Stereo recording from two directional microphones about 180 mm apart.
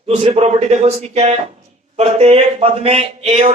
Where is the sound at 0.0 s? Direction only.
35° right (ahead or behind).